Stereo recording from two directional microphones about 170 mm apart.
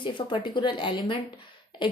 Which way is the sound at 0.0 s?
30° left (ahead or behind).